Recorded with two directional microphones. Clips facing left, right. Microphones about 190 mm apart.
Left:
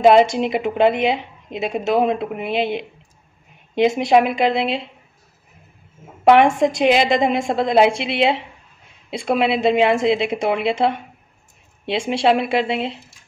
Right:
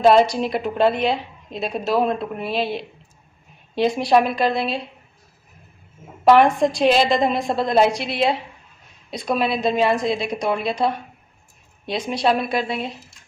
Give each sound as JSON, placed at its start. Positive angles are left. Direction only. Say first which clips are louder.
{"t": 0.0, "sound": "a woman's voice", "louder": "left 2 dB", "side_deg": 20}
{"t": 6.4, "sound": "a woman's voice", "louder": "left 1 dB", "side_deg": 25}